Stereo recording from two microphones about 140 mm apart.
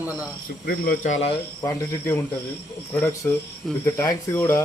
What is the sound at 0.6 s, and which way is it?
Speech, 90° left.